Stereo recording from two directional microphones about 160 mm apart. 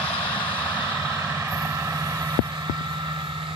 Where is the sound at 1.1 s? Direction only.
15° right (ahead or behind).